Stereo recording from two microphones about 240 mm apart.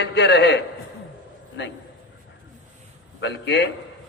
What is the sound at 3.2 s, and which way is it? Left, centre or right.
Speech, left.